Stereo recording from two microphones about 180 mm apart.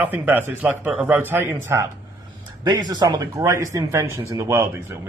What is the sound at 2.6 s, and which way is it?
Speech, 25° right (ahead or behind).